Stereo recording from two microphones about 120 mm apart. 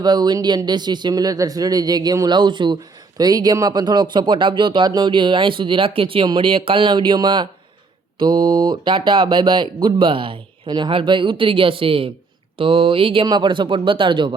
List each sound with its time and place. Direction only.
0.0 s speech: 35° right (ahead or behind)
13.2 s speech: 40° right (ahead or behind)